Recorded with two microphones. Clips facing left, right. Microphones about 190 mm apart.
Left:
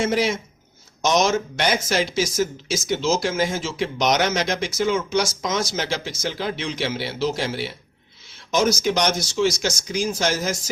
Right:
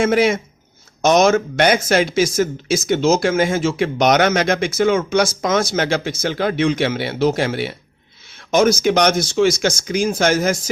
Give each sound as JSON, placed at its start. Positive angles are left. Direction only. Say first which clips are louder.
{"t": 0.0, "sound": "speech", "louder": "right 6 dB", "side_deg": -55}